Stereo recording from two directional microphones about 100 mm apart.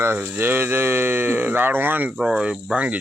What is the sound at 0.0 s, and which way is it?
Speech, 20° right (ahead or behind).